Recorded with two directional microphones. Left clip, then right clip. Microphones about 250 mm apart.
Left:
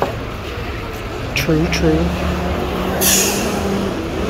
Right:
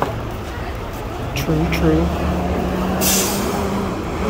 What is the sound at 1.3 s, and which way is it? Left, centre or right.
Speech, centre.